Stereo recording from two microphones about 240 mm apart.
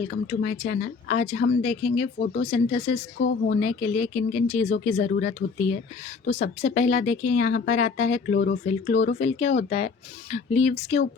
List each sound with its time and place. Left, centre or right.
0.3 s speech: left
3.2 s speech: left
3.5 s speech: left